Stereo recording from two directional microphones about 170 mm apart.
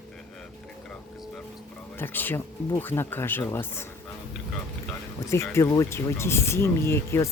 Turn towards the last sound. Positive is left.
turn(degrees=15)  # may be behind; listen again after turning